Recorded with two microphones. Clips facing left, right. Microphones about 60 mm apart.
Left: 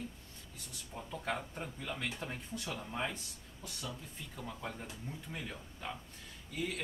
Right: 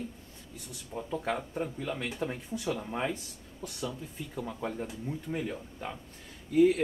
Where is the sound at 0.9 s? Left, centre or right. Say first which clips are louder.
Right 6 dB; centre.